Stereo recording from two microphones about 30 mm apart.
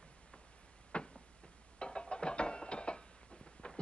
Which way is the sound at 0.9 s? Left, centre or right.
Left.